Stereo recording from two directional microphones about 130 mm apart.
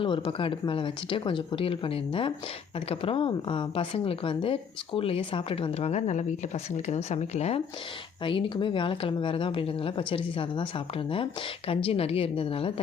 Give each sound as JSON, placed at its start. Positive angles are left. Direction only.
{"t": 0.0, "sound": "speech", "side_deg": 45}
{"t": 8.2, "sound": "speech", "side_deg": 40}